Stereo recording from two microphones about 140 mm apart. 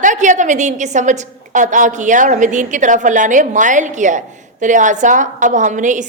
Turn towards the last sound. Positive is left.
turn(degrees=-60)  # may be behind; listen again after turning